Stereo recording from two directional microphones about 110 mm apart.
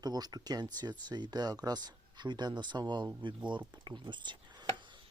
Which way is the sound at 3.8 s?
45° right (ahead or behind).